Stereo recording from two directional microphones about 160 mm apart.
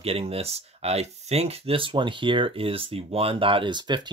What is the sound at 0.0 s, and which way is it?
Speech, 35° right (ahead or behind).